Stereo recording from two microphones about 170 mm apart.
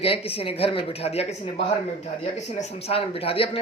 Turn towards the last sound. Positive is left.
turn(degrees=35)  # may be behind; listen again after turning